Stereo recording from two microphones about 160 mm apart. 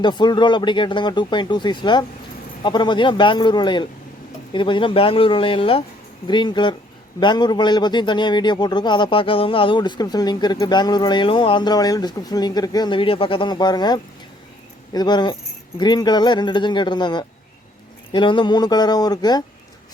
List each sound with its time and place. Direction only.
0.0 s a man's voice: 30° left (ahead or behind)